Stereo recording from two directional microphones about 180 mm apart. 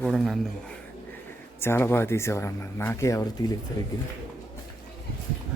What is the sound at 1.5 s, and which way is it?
A woman's voice, 15° left (ahead or behind).